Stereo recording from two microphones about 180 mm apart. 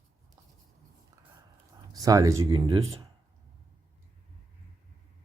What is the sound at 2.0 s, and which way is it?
Speech, 20° right (ahead or behind).